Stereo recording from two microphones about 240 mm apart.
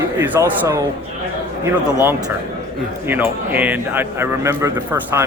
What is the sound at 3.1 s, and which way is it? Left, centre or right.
A man's voice, centre.